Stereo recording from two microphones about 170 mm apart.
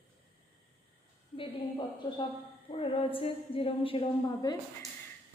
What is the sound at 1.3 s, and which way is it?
A woman's voice, 30° left (ahead or behind).